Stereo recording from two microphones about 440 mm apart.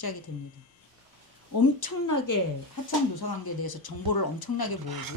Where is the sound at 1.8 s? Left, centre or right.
Left.